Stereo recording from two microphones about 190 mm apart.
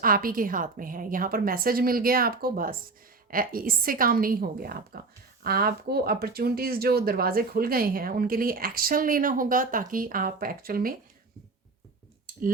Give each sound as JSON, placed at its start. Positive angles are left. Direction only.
{"t": 0.0, "sound": "speech", "side_deg": -50}